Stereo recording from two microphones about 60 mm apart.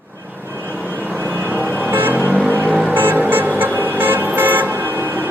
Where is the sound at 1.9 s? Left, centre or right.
Right.